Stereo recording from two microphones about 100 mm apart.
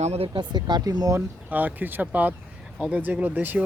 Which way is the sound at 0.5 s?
45° right (ahead or behind).